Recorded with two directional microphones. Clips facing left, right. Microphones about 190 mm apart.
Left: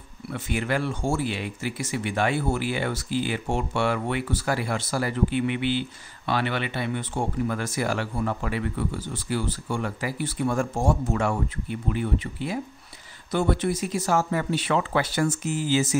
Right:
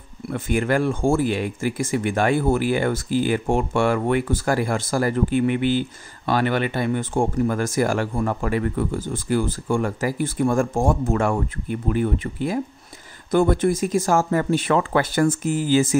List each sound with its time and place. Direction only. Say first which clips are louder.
0.3 s speech: right 6 dB; 50° right (ahead or behind)